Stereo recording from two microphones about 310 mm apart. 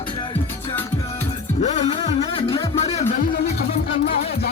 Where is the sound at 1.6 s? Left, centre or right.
Left.